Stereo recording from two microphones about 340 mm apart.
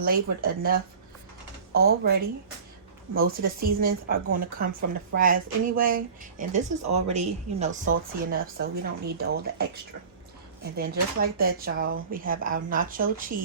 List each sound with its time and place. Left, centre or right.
0.0 s speech: right
10.8 s speech: right